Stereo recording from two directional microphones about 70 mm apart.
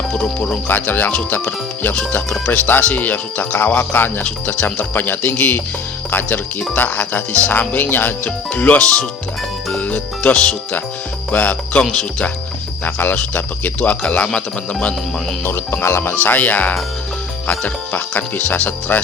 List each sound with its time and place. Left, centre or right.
0.1 s speech: centre
0.7 s speech: left
8.8 s speech: centre
9.7 s speech: centre
11.8 s speech: centre
12.8 s speech: left
15.4 s music: left
16.2 s speech: left
17.4 s music: left
18.2 s speech: centre